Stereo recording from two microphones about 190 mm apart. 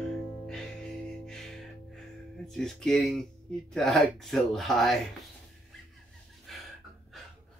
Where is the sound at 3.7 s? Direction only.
Centre (ahead or behind).